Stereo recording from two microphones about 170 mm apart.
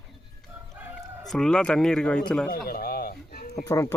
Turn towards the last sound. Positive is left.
turn(degrees=15)  # may be behind; listen again after turning